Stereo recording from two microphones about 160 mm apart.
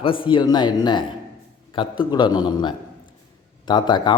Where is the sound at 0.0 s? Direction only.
30° left (ahead or behind).